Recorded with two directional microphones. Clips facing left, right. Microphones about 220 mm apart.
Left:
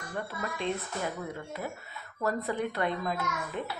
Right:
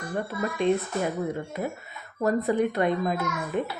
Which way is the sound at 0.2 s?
20° right (ahead or behind).